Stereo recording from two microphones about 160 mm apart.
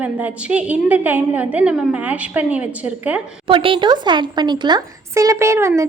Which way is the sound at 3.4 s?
30° right (ahead or behind).